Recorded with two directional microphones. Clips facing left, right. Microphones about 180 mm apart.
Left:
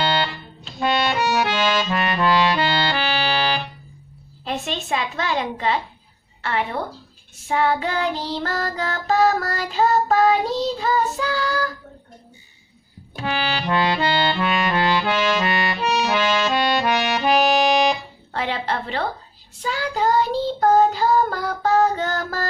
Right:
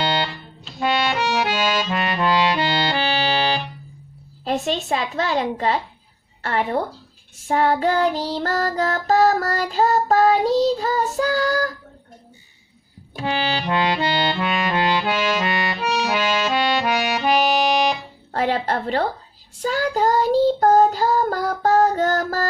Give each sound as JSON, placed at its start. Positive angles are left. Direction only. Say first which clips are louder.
{"t": 0.0, "sound": "music", "louder": "left 1 dB", "side_deg": -20}
{"t": 0.7, "sound": "accordion", "louder": "even", "side_deg": -5}
{"t": 4.5, "sound": "child singing", "louder": "right 3 dB", "side_deg": -35}
{"t": 13.2, "sound": "music", "louder": "right 1 dB", "side_deg": -25}
{"t": 18.3, "sound": "a woman's voice", "louder": "right 4 dB", "side_deg": -45}
{"t": 19.6, "sound": "child singing", "louder": "right 3 dB", "side_deg": -45}